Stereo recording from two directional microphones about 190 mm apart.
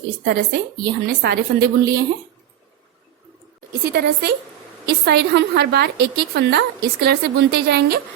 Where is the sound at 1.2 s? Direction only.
60° right (ahead or behind).